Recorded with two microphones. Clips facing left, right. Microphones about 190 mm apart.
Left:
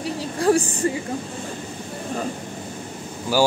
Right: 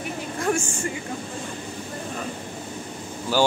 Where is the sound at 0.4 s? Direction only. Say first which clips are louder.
Left 6 dB; 35° left (ahead or behind).